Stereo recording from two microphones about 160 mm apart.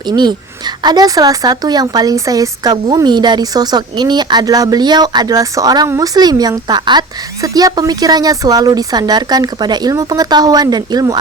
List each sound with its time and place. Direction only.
0.1 s speech: 25° right (ahead or behind)